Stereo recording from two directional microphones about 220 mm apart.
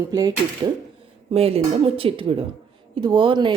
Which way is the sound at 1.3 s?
25° right (ahead or behind).